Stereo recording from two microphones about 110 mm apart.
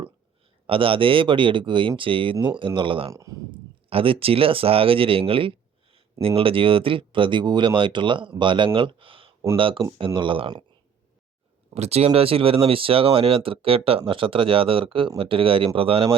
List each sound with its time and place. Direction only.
0.7 s speech: 55° right (ahead or behind)
3.1 s speech: 30° right (ahead or behind)
3.5 s speech: 55° right (ahead or behind)
11.7 s speech: 70° right (ahead or behind); by 16.0 s 55° right (ahead or behind)